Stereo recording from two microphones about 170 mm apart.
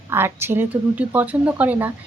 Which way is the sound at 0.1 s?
15° right (ahead or behind).